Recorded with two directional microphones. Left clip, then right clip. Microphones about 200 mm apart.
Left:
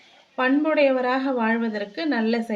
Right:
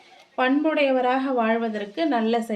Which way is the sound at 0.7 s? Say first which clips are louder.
Left 1 dB; 10° right (ahead or behind).